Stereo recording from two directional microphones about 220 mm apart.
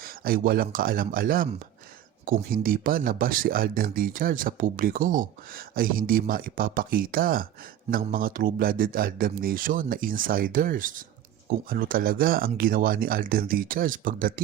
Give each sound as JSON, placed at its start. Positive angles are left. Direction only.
{"t": 0.0, "sound": "speech", "side_deg": -40}